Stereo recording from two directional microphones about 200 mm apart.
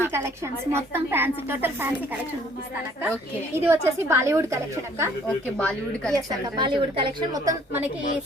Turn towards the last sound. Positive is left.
turn(degrees=-15)  # may be behind; listen again after turning